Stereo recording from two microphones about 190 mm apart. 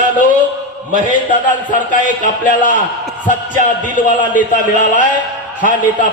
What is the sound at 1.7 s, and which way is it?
Speech, 40° left (ahead or behind).